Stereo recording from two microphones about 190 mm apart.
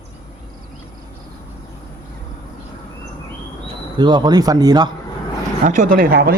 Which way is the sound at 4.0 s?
25° right (ahead or behind).